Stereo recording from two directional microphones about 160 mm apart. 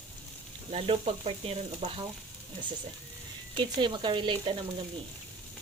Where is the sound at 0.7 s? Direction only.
40° right (ahead or behind).